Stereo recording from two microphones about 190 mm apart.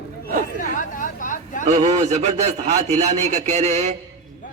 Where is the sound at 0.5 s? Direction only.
45° left (ahead or behind).